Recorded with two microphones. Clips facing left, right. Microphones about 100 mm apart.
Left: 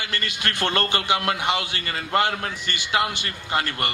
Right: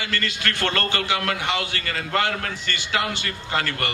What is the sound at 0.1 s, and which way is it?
A man's voice, 15° left (ahead or behind).